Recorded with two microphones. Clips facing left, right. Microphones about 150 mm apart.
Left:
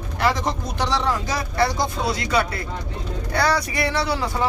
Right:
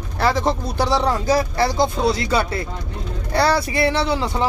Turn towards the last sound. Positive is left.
turn(degrees=-25)  # may be behind; listen again after turning